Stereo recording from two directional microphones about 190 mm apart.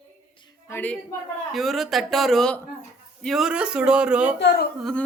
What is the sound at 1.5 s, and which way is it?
A man's voice, centre (ahead or behind).